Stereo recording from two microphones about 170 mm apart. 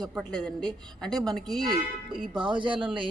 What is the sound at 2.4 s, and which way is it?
Speech, 30° right (ahead or behind).